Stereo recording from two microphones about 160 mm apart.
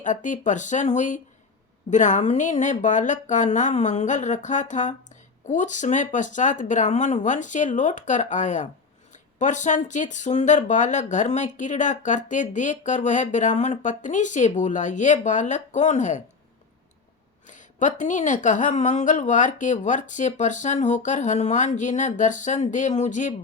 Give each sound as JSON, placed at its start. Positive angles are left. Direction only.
{"t": 0.0, "sound": "speech", "side_deg": 50}
{"t": 17.5, "sound": "speech", "side_deg": 50}